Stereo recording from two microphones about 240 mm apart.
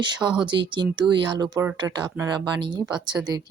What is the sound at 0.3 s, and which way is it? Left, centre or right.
Speech, centre.